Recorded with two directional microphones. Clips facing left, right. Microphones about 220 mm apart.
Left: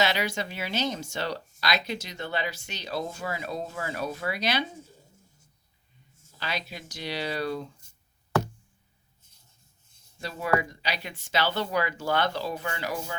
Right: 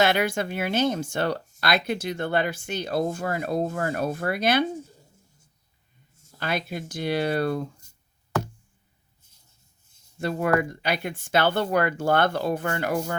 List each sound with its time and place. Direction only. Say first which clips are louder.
0.0 s speech: right 5 dB; 55° right (ahead or behind)
6.4 s speech: right 6 dB; 55° right (ahead or behind)
10.2 s speech: right 4 dB; 55° right (ahead or behind)